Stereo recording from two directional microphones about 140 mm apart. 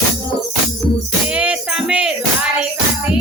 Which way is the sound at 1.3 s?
10° right (ahead or behind).